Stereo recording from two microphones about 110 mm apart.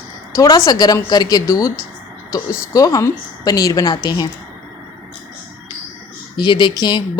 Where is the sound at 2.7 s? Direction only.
30° left (ahead or behind).